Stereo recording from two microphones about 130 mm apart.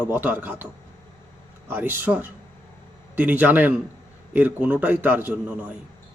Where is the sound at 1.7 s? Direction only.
15° right (ahead or behind).